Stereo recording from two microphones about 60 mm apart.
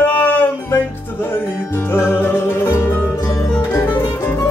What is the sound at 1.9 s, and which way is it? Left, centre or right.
Music, left.